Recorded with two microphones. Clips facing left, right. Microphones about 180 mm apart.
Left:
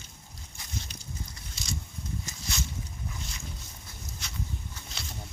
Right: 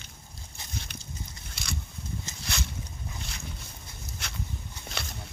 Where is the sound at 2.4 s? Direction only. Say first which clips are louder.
Right 1 dB; 65° right (ahead or behind).